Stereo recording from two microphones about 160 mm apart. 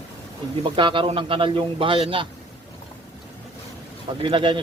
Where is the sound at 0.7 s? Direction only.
30° right (ahead or behind).